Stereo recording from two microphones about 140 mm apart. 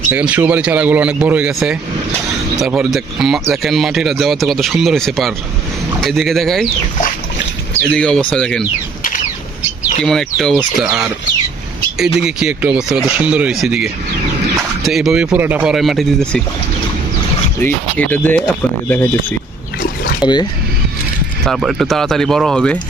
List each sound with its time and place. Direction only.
0.1 s speech: 10° right (ahead or behind)
7.8 s speech: 5° left (ahead or behind)
10.0 s speech: 5° left (ahead or behind)
12.2 s speech: 5° right (ahead or behind)
15.6 s speech: centre (ahead or behind)
17.6 s speech: 15° left (ahead or behind)
20.2 s speech: 30° left (ahead or behind)
21.4 s speech: centre (ahead or behind)